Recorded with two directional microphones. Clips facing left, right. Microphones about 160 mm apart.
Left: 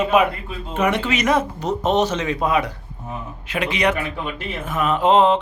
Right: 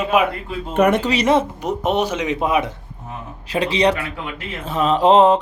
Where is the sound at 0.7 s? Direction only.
50° right (ahead or behind).